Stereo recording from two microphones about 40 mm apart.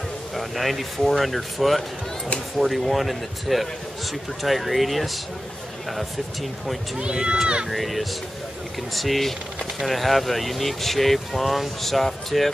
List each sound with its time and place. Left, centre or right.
0.3 s speech: centre
7.0 s speech: right
7.6 s speech: centre